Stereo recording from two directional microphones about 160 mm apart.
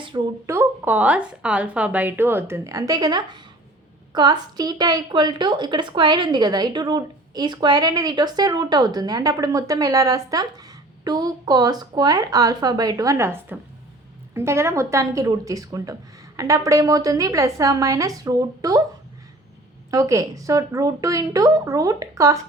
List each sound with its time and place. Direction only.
0.4 s a woman's voice: 15° right (ahead or behind)
19.9 s a woman's voice: 20° right (ahead or behind)